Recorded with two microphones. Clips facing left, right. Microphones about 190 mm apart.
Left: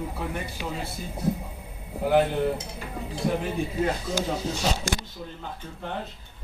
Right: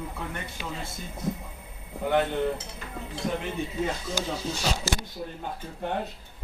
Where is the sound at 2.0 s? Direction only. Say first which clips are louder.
Left 3 dB; 5° left (ahead or behind).